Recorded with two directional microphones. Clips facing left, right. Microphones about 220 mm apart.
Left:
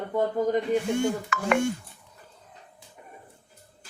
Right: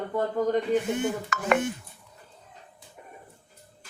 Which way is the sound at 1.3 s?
40° right (ahead or behind).